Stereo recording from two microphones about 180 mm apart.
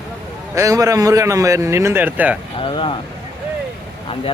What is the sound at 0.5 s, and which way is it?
A man's voice, 15° right (ahead or behind).